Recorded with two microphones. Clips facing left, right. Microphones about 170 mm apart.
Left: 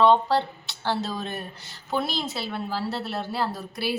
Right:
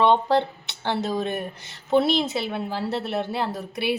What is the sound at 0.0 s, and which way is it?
A woman's voice, 20° right (ahead or behind).